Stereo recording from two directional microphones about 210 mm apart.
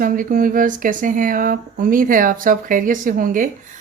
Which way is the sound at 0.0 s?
40° right (ahead or behind).